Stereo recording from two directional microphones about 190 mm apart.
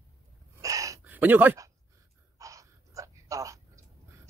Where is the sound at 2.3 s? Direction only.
15° right (ahead or behind).